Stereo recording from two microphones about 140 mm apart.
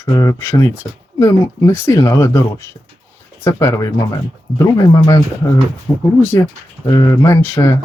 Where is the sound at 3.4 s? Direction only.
25° left (ahead or behind).